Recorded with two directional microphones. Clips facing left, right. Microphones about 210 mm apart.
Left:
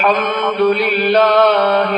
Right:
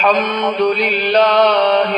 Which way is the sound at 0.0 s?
50° left (ahead or behind).